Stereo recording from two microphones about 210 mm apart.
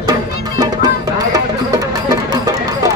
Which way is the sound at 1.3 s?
15° right (ahead or behind).